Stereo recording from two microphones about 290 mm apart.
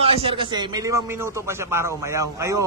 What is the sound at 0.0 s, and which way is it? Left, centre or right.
A man's voice, centre.